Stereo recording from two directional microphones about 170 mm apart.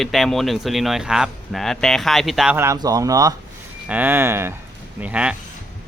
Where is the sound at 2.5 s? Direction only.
15° right (ahead or behind).